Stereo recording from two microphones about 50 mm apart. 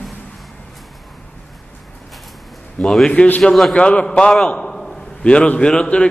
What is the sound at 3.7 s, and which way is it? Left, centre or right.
Speech, left.